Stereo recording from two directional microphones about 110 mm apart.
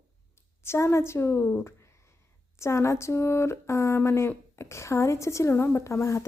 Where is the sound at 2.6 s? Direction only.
25° left (ahead or behind).